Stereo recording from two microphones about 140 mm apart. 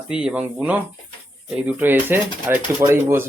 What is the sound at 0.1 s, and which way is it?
Speech, 5° right (ahead or behind).